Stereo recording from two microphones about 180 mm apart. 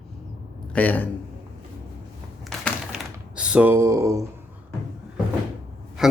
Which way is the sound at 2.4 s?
Centre (ahead or behind).